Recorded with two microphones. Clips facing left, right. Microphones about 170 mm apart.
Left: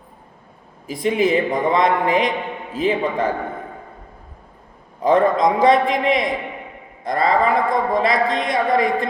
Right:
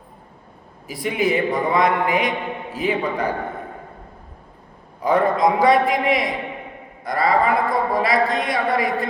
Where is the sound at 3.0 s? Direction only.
45° left (ahead or behind).